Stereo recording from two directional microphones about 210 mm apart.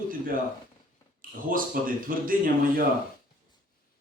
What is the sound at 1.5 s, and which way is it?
Speech, 40° right (ahead or behind).